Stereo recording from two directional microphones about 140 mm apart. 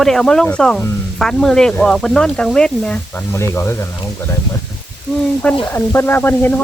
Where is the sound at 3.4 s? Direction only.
20° left (ahead or behind).